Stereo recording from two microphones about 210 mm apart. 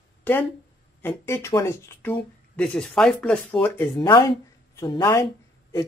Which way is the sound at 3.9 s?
20° left (ahead or behind).